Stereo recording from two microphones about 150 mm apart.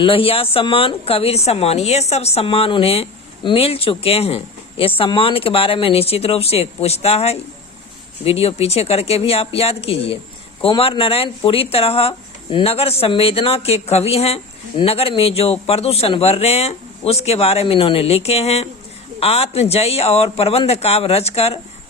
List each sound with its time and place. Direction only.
0.0 s a man's voice: 35° left (ahead or behind)